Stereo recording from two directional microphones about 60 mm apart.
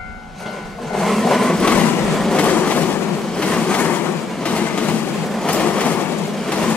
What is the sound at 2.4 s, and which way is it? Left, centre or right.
Train, left.